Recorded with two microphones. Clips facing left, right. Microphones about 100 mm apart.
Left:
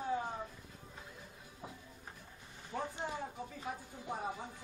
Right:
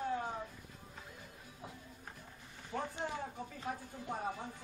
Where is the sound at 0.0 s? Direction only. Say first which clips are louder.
Even; 5° left (ahead or behind).